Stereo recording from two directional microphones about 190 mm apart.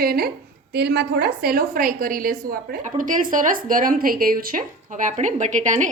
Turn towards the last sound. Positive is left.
turn(degrees=-40)  # may be behind; listen again after turning